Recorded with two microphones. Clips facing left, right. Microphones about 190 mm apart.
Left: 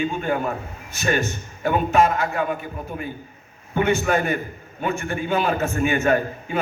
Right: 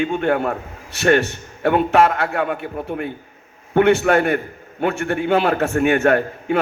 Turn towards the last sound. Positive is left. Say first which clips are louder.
# right 4 dB
turn(degrees=-70)  # may be behind; listen again after turning